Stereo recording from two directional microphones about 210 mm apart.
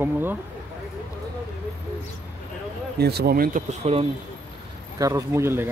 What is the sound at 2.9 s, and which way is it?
Speech, 50° right (ahead or behind).